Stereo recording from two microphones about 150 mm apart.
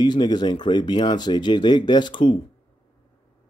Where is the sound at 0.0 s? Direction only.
30° left (ahead or behind).